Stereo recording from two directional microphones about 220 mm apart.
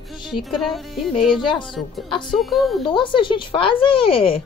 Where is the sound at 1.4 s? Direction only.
20° left (ahead or behind).